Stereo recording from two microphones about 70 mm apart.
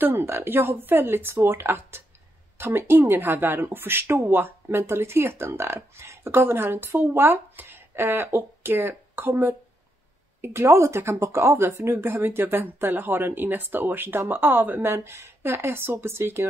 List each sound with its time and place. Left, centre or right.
0.0 s speech: right